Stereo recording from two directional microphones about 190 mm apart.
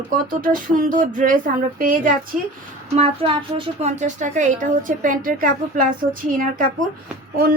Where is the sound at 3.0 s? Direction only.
30° right (ahead or behind).